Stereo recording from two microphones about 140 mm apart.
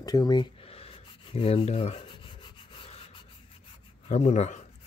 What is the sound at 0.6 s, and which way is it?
Rub, 45° left (ahead or behind).